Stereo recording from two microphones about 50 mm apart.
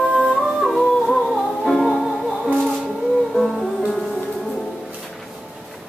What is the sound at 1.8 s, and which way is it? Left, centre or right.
Music, centre.